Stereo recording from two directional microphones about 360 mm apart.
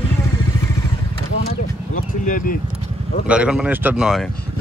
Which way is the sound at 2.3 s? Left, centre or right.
Left.